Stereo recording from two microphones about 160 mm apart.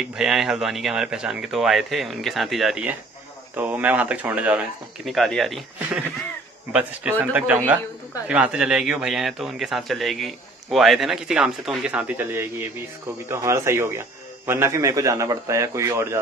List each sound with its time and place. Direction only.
0.0 s a man's voice: 5° right (ahead or behind)
6.7 s a man's voice: 10° right (ahead or behind)